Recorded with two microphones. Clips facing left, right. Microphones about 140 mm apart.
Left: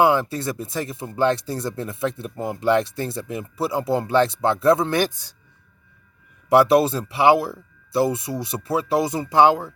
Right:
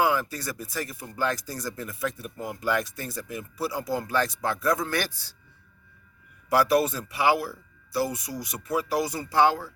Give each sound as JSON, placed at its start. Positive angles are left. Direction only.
{"t": 0.0, "sound": "speech", "side_deg": 25}
{"t": 6.5, "sound": "speech", "side_deg": 25}